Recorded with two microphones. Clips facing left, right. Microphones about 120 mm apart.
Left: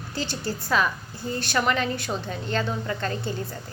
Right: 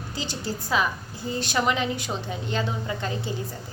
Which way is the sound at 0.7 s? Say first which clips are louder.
Left 1 dB; 15° right (ahead or behind).